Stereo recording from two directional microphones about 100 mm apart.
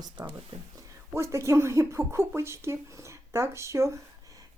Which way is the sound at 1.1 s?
30° right (ahead or behind).